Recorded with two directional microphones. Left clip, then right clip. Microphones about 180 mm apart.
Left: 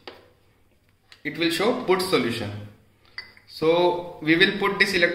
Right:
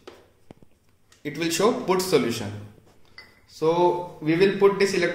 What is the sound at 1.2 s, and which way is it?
A man's voice, 40° right (ahead or behind).